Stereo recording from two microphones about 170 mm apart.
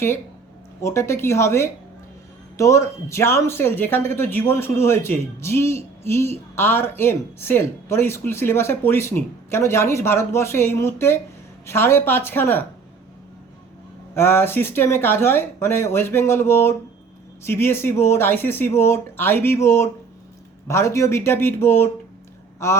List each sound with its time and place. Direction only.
0.8 s speech: 15° left (ahead or behind)
14.1 s speech: 15° left (ahead or behind)